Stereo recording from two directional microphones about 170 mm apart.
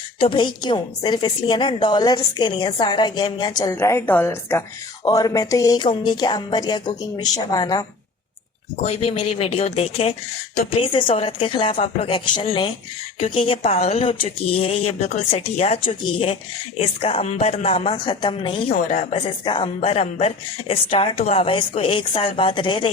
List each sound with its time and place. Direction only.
0.2 s a woman's voice: 30° left (ahead or behind)
8.8 s speech: 35° left (ahead or behind)
18.9 s speech: 45° left (ahead or behind)
19.2 s speech: 30° left (ahead or behind)